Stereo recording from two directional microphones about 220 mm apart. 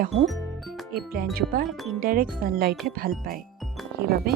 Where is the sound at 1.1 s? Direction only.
45° right (ahead or behind).